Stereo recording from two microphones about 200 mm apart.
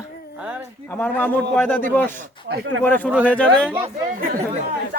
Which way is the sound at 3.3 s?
5° left (ahead or behind).